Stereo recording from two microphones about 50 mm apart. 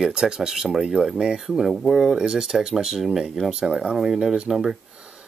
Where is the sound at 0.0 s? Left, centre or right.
Centre.